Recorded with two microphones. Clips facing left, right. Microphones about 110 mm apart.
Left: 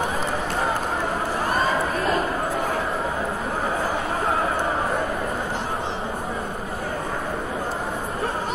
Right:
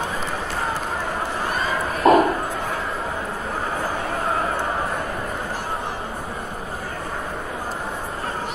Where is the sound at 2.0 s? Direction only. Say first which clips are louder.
Right 12 dB; 65° right (ahead or behind).